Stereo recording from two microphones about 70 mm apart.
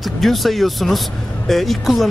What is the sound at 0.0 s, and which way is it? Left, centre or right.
A man's voice, centre.